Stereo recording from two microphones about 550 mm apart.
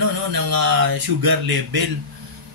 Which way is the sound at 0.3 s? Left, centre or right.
Right.